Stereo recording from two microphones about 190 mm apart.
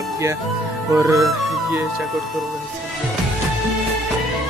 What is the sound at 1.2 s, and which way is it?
Speech, centre (ahead or behind).